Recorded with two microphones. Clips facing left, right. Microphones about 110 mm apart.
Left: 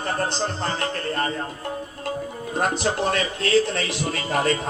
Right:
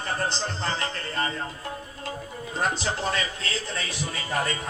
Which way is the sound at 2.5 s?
55° left (ahead or behind).